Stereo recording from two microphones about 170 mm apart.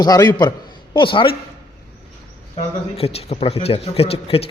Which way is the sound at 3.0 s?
35° left (ahead or behind).